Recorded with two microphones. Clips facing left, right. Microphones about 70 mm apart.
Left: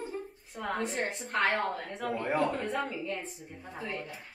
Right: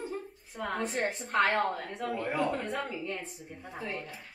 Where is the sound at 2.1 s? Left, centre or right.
Left.